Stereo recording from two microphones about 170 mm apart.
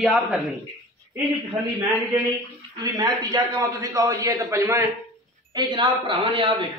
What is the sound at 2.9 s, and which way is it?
A man's voice, 25° right (ahead or behind).